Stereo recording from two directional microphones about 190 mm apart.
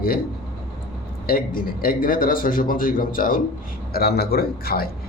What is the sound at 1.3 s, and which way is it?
A man's voice, 45° left (ahead or behind).